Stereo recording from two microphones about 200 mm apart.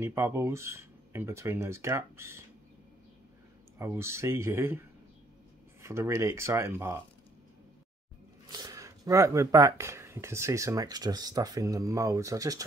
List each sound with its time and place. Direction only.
0.0 s speech: 15° right (ahead or behind)
3.7 s speech: 15° right (ahead or behind)
8.5 s speech: 20° right (ahead or behind)